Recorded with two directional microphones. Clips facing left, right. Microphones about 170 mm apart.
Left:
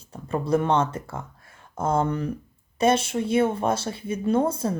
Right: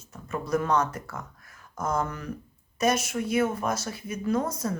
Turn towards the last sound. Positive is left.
turn(degrees=30)  # may be behind; listen again after turning